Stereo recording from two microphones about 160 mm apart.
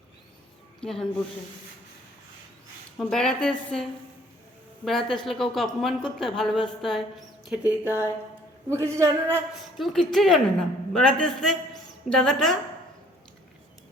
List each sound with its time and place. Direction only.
0.8 s speech: 5° left (ahead or behind)
3.0 s speech: 5° left (ahead or behind)
4.9 s speech: centre (ahead or behind)
7.5 s a man's voice: 10° right (ahead or behind)
9.7 s a woman's voice: centre (ahead or behind)